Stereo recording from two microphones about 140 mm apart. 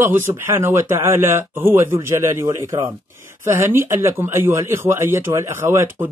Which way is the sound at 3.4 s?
15° right (ahead or behind).